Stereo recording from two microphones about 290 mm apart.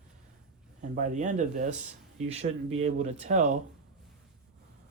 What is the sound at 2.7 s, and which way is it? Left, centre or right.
Speech, right.